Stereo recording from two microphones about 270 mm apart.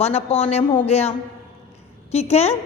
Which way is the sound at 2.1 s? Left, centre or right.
Left.